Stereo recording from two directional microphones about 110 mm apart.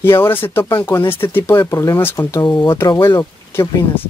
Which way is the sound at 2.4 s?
40° left (ahead or behind).